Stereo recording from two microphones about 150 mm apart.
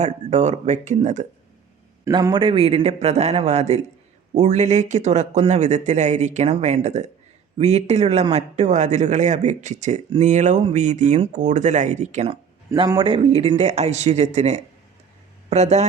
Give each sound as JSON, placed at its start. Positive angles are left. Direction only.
{"t": 0.0, "sound": "a man's voice", "side_deg": -50}
{"t": 2.0, "sound": "a man's voice", "side_deg": -25}
{"t": 12.3, "sound": "a sound", "side_deg": -35}
{"t": 13.0, "sound": "a man's voice", "side_deg": -35}